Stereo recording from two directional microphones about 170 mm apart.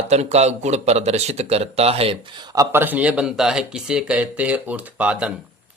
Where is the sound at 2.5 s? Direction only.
20° right (ahead or behind).